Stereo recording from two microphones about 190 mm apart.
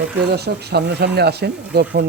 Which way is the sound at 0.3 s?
60° right (ahead or behind).